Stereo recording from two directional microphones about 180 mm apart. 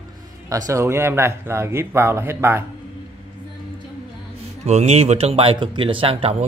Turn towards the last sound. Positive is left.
turn(degrees=-30)  # may be behind; listen again after turning